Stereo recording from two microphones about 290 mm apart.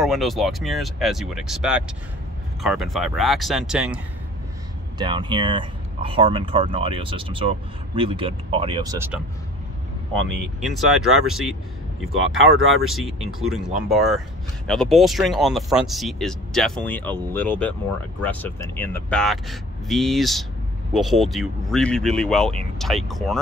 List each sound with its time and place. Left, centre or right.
0.0 s speech: centre
4.9 s speech: centre
10.4 s speech: centre
12.8 s speech: centre